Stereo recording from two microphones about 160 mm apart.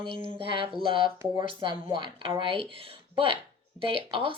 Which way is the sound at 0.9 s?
30° right (ahead or behind).